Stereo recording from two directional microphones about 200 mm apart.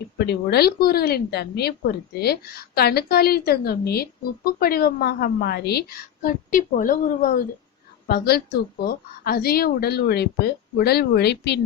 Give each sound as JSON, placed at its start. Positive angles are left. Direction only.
{"t": 0.2, "sound": "a woman's voice", "side_deg": 55}